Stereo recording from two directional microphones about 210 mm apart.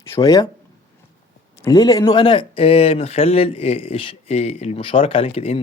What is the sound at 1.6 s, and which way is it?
Speech, 20° left (ahead or behind).